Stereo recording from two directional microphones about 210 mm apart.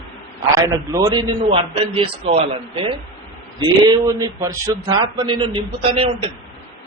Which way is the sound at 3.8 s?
20° right (ahead or behind).